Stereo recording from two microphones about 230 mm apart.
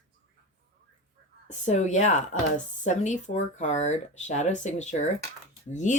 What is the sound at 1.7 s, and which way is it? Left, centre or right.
Speech, left.